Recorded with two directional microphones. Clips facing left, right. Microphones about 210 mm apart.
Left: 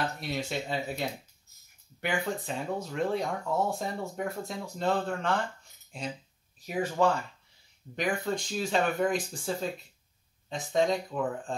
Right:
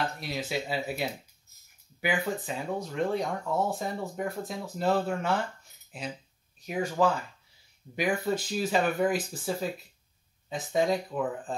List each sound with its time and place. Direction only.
0.2 s speech: centre (ahead or behind)